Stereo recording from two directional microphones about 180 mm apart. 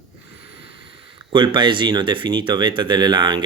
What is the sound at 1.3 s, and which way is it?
Speech, 25° right (ahead or behind).